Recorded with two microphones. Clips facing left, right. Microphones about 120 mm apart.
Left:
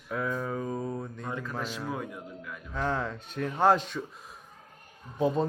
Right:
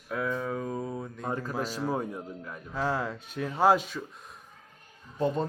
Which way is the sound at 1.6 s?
40° right (ahead or behind).